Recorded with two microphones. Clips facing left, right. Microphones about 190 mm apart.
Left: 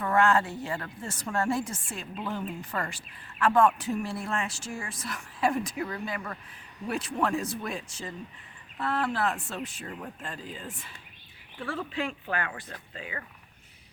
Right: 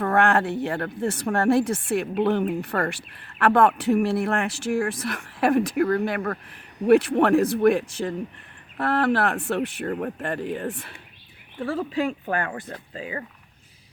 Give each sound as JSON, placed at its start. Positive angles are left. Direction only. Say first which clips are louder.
{"t": 0.0, "sound": "speech", "louder": "right 4 dB", "side_deg": -60}
{"t": 11.6, "sound": "speech", "louder": "right 7 dB", "side_deg": -40}
{"t": 12.7, "sound": "speech", "louder": "right 7 dB", "side_deg": -30}